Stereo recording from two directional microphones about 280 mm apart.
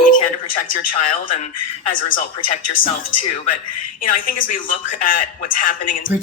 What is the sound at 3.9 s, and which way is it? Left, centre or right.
Speech, left.